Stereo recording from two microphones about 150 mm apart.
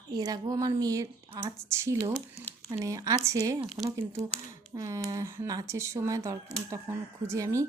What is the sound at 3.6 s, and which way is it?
Speech, centre (ahead or behind).